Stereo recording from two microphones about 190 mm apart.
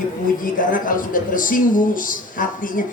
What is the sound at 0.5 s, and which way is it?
A man's voice, 45° left (ahead or behind).